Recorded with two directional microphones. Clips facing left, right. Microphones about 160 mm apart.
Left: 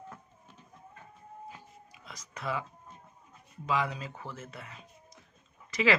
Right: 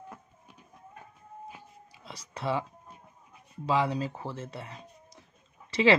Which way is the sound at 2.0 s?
30° right (ahead or behind).